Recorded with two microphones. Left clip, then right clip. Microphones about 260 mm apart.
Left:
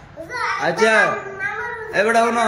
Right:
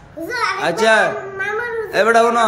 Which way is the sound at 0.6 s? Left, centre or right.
Centre.